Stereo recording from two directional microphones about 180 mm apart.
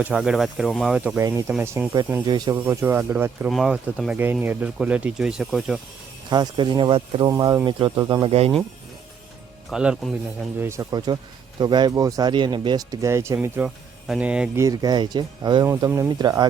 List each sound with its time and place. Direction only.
0.0 s speech: 5° right (ahead or behind); by 2.6 s 25° right (ahead or behind)
2.6 s speech: 10° right (ahead or behind)
6.3 s speech: 25° right (ahead or behind)
8.3 s speech: 35° right (ahead or behind)
9.6 s speech: 5° right (ahead or behind)
10.6 s speech: 15° right (ahead or behind)
14.6 s speech: 20° right (ahead or behind)